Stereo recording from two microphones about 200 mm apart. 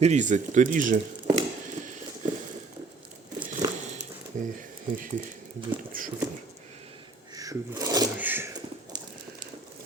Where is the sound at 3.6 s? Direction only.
15° right (ahead or behind).